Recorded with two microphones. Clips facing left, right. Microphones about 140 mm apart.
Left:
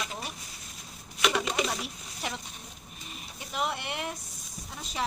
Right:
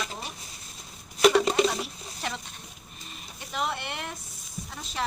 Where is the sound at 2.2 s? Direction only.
10° left (ahead or behind).